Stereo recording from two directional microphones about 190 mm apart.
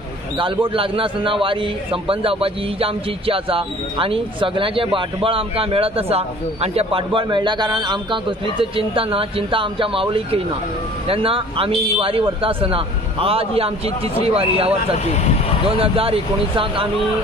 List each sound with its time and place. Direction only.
0.4 s speech: 30° right (ahead or behind)
15.8 s speech: 30° right (ahead or behind)